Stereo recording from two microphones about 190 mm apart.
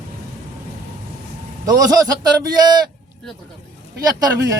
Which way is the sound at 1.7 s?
20° right (ahead or behind).